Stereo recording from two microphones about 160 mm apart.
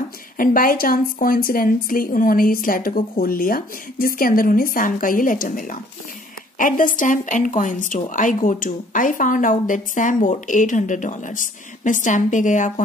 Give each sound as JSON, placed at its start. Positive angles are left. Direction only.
{"t": 0.4, "sound": "a woman's voice", "side_deg": 60}